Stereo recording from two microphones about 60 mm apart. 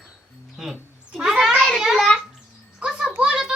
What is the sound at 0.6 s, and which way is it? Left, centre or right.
Cat, centre.